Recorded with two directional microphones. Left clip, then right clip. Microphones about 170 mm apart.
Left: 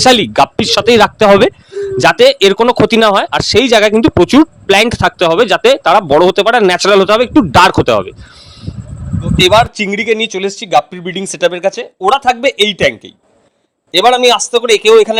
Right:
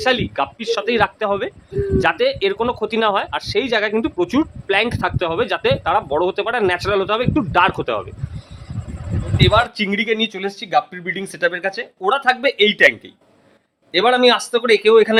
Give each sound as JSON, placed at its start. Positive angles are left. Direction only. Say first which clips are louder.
{"t": 0.0, "sound": "speech", "louder": "left 11 dB", "side_deg": 55}
{"t": 2.0, "sound": "speech", "louder": "left 11 dB", "side_deg": 50}
{"t": 9.4, "sound": "speech", "louder": "left 8 dB", "side_deg": 45}
{"t": 13.9, "sound": "speech", "louder": "left 6 dB", "side_deg": 40}